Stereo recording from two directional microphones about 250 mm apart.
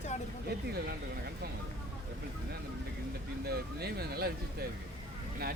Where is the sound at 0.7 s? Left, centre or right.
Right.